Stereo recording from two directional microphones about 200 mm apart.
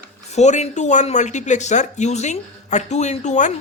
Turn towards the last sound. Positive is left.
turn(degrees=35)  # may be behind; listen again after turning